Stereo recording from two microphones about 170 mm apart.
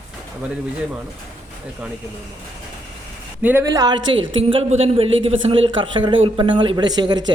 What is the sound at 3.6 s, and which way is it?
Speech, 20° right (ahead or behind).